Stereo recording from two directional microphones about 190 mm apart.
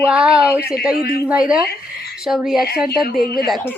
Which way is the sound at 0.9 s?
50° left (ahead or behind).